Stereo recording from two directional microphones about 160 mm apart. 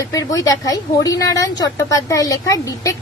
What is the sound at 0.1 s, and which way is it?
A woman's voice, 20° left (ahead or behind).